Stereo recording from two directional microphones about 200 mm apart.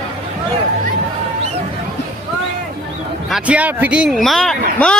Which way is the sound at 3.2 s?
5° right (ahead or behind).